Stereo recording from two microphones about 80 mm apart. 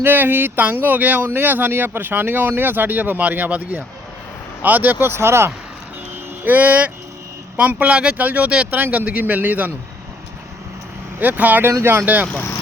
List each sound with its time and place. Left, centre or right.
0.0 s speech: right
11.2 s speech: right
11.7 s speech: right
12.0 s speech: right